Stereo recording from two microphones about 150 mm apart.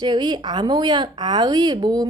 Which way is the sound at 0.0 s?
25° right (ahead or behind).